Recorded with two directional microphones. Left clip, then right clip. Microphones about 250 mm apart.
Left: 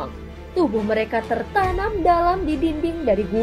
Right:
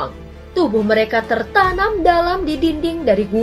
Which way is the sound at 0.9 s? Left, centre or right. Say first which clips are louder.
Right 6 dB; left.